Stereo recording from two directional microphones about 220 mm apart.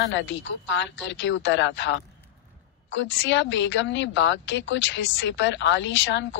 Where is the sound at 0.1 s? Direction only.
55° left (ahead or behind).